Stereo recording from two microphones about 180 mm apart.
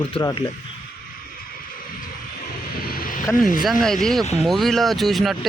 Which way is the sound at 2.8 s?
55° left (ahead or behind).